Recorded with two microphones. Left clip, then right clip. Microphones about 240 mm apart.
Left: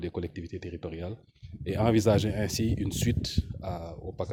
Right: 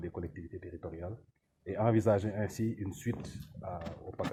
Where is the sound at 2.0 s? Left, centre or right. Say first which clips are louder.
Left 4 dB; left.